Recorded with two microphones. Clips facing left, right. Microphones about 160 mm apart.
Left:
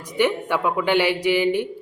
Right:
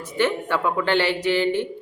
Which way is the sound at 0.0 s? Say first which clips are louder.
Left 1 dB; 15° left (ahead or behind).